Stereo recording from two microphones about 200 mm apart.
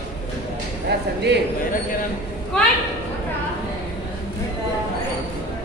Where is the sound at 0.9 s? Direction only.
55° right (ahead or behind).